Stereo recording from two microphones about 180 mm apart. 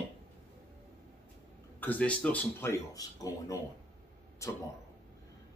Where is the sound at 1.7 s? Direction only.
10° left (ahead or behind).